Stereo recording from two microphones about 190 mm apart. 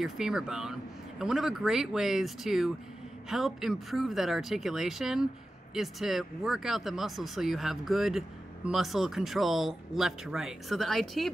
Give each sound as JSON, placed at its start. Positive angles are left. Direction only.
{"t": 0.0, "sound": "speech", "side_deg": -5}